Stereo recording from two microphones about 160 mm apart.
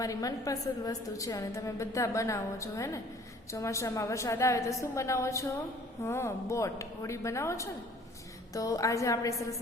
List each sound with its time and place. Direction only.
0.0 s a woman's voice: 20° left (ahead or behind)